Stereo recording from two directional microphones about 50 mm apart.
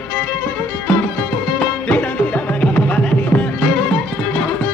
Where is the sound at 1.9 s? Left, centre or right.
Left.